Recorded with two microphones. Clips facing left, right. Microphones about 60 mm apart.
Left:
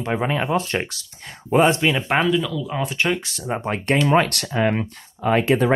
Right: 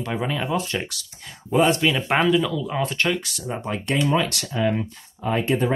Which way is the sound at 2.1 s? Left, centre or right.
Centre.